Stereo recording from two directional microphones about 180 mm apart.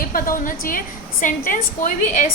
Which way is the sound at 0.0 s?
50° left (ahead or behind).